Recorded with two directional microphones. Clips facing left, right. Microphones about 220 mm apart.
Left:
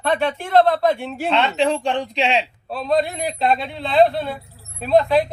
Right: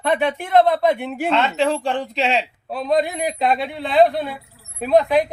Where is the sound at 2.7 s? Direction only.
20° right (ahead or behind).